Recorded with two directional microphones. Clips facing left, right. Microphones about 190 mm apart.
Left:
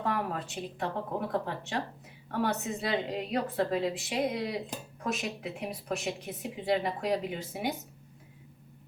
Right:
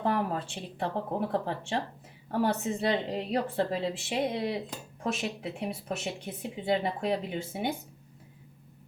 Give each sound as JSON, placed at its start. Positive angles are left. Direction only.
{"t": 0.0, "sound": "a woman's voice", "side_deg": -30}